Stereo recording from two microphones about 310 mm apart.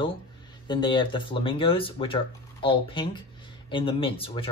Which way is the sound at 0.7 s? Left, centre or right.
Centre.